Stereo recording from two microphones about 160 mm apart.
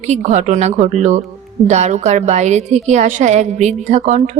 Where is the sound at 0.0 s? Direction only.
45° right (ahead or behind).